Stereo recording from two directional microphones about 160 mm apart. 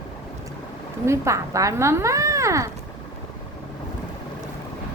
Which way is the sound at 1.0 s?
15° right (ahead or behind).